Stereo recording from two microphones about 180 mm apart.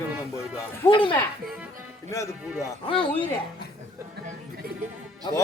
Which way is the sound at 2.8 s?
30° left (ahead or behind).